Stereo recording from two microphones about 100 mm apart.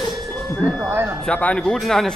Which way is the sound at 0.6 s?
5° right (ahead or behind).